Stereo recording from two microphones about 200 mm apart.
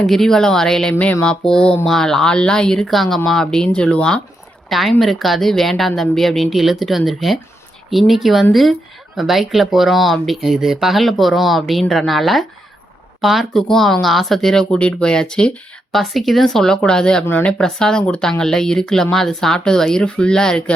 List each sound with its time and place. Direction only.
0.0 s speech: centre (ahead or behind)